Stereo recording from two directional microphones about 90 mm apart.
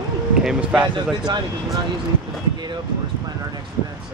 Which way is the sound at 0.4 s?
10° right (ahead or behind).